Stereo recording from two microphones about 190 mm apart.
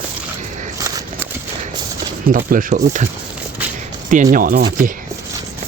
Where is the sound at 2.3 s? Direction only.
45° right (ahead or behind).